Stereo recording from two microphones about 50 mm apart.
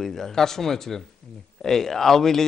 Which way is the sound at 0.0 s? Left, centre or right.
Centre.